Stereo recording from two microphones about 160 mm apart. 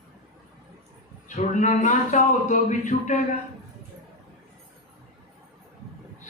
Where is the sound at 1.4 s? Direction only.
50° left (ahead or behind).